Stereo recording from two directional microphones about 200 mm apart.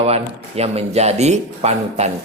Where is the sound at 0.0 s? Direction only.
30° right (ahead or behind).